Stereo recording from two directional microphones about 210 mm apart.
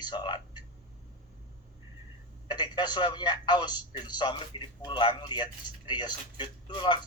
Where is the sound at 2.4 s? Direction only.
20° left (ahead or behind).